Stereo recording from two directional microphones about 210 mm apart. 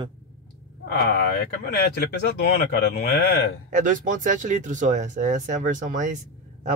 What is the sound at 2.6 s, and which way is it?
Speech, 50° left (ahead or behind).